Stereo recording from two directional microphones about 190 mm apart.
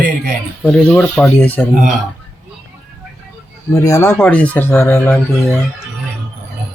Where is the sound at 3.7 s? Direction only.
15° left (ahead or behind).